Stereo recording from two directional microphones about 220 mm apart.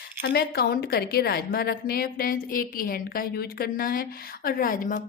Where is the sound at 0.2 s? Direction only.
45° left (ahead or behind).